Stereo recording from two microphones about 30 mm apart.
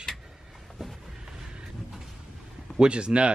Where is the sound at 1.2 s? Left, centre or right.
Right.